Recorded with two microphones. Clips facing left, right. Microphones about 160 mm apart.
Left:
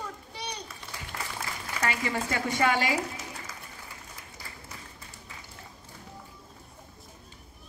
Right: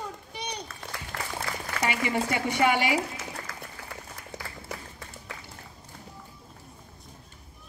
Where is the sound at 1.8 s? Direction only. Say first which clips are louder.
Right 3 dB; 15° right (ahead or behind).